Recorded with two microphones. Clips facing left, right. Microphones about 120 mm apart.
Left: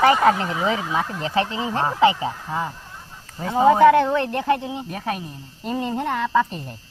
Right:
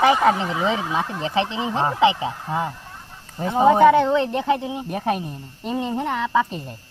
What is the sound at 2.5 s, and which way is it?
Speech, 25° right (ahead or behind).